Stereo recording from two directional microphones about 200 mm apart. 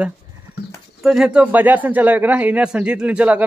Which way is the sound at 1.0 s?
5° right (ahead or behind).